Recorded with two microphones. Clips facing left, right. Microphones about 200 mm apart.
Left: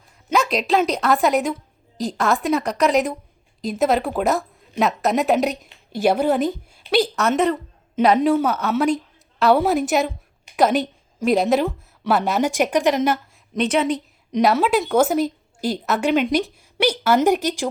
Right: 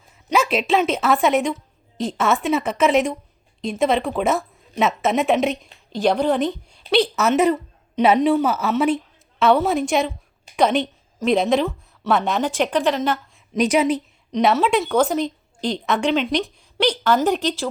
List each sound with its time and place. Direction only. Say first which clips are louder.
0.3 s a woman's voice: right 1 dB; centre (ahead or behind); by 13.1 s 15° left (ahead or behind)
13.5 s speech: right 2 dB; 10° right (ahead or behind)
14.3 s a woman's voice: even; centre (ahead or behind)